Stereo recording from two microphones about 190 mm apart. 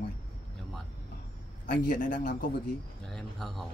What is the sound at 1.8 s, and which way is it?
Speech, 45° left (ahead or behind).